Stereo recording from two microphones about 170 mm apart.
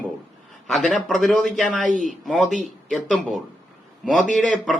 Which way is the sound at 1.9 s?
50° right (ahead or behind).